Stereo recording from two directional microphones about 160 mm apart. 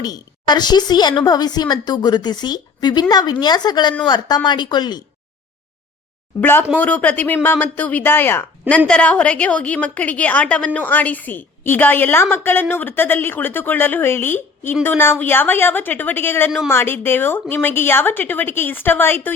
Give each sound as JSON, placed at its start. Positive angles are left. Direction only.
{"t": 0.0, "sound": "a woman's voice", "side_deg": 25}
{"t": 6.4, "sound": "a woman's voice", "side_deg": 15}